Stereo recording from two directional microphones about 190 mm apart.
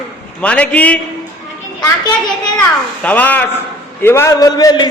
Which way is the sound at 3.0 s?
10° left (ahead or behind).